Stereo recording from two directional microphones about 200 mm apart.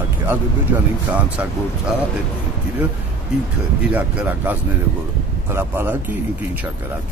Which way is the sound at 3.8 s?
10° right (ahead or behind).